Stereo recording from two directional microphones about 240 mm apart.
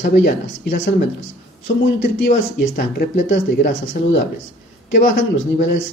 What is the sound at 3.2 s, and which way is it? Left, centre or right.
Speech, left.